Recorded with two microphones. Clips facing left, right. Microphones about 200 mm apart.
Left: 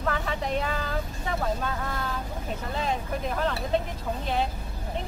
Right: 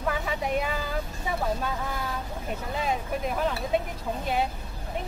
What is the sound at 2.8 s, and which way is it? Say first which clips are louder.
Speech: right 1 dB; 10° right (ahead or behind).